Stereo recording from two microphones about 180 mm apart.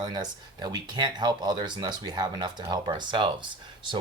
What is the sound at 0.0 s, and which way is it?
Speech, 25° right (ahead or behind).